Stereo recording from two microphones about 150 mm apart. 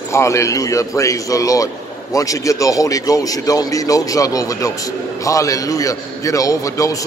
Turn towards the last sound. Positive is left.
turn(degrees=20)  # may be behind; listen again after turning